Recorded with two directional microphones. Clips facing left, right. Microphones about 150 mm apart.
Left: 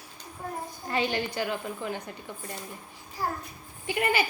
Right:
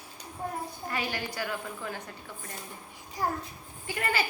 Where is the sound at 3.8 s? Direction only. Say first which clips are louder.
Left 4 dB; 15° left (ahead or behind).